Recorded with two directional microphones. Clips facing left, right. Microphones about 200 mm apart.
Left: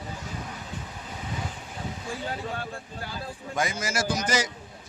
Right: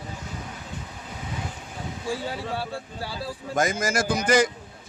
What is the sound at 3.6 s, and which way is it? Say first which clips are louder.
Speech: right 4 dB; 45° right (ahead or behind).